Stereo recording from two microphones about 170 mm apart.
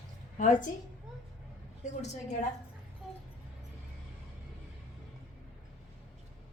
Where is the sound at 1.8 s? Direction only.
45° left (ahead or behind).